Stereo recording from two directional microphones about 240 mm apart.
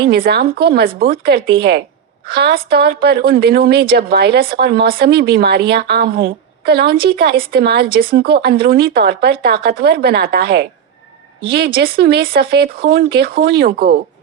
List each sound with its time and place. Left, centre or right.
0.1 s speech: right